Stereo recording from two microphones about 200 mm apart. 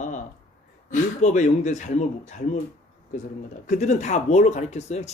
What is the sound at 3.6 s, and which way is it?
Speech, 35° left (ahead or behind).